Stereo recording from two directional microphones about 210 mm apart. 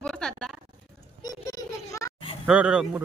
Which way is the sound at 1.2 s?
20° left (ahead or behind).